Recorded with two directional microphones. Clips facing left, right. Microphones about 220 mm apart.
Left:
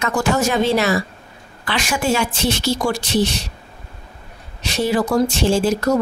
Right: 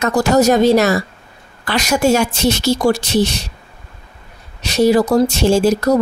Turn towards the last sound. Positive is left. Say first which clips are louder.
# right 4 dB
turn(degrees=-40)  # may be behind; listen again after turning